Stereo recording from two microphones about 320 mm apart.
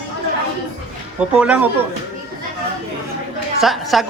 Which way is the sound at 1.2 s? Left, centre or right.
Centre.